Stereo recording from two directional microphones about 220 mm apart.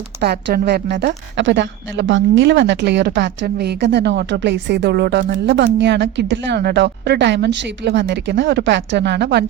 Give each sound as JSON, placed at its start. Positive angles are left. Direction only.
{"t": 0.2, "sound": "a woman's voice", "side_deg": -45}